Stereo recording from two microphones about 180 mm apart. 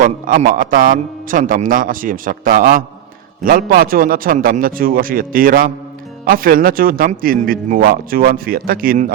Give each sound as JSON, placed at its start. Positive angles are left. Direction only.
{"t": 0.0, "sound": "speech", "side_deg": -50}